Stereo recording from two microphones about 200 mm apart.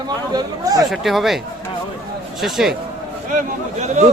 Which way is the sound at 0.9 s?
Centre (ahead or behind).